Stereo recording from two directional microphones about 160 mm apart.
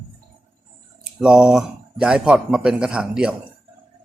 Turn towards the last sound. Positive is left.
turn(degrees=-5)  # may be behind; listen again after turning